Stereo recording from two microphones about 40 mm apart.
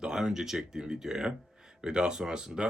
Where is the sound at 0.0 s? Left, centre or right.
Centre.